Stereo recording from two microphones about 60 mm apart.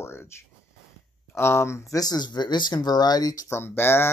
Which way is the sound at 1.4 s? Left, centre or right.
Left.